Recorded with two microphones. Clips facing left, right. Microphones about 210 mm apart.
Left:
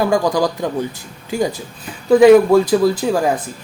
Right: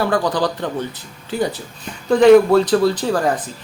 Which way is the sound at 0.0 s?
10° left (ahead or behind).